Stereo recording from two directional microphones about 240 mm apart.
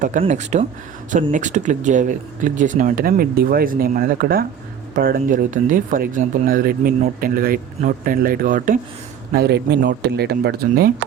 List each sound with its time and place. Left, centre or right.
0.0 s speech: right